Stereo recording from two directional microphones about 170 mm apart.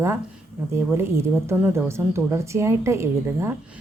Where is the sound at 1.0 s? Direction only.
15° right (ahead or behind).